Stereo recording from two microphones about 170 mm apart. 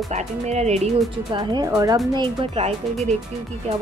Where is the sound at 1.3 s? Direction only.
25° right (ahead or behind).